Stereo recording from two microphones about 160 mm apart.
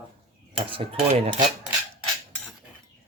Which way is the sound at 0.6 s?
35° right (ahead or behind).